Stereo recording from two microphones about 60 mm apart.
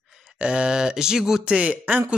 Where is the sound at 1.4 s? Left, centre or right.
Centre.